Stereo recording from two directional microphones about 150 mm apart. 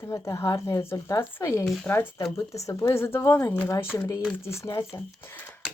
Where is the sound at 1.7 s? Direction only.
Centre (ahead or behind).